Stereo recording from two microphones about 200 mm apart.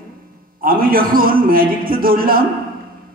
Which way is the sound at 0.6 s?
45° right (ahead or behind).